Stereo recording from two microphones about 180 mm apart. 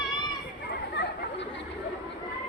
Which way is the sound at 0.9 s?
80° left.